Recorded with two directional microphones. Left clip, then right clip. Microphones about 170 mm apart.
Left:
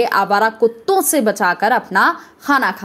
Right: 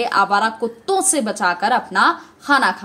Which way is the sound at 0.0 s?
35° left (ahead or behind).